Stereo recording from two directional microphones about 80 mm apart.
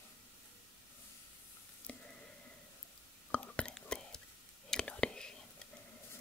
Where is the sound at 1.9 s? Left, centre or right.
Centre.